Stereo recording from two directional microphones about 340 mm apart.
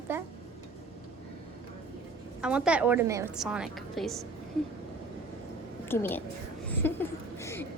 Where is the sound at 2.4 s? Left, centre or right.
Centre.